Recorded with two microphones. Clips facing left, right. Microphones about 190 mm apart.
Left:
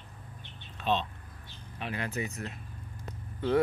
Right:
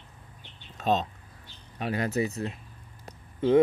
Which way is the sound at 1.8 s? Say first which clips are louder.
Right 7 dB; 40° right (ahead or behind).